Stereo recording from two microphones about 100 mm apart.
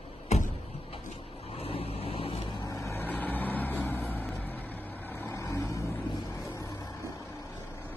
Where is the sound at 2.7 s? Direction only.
30° left (ahead or behind).